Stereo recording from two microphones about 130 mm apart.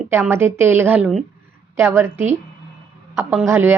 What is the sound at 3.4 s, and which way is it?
Speech, 20° right (ahead or behind).